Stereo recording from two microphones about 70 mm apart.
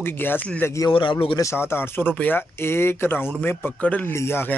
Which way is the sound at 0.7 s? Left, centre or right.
Left.